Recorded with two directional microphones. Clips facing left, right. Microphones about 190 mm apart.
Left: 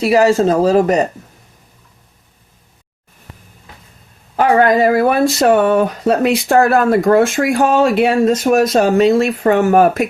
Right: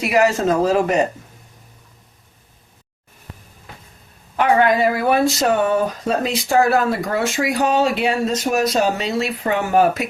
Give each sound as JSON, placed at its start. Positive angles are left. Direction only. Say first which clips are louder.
{"t": 0.0, "sound": "speech", "louder": "left 5 dB", "side_deg": 30}
{"t": 4.4, "sound": "speech", "louder": "left 4 dB", "side_deg": 40}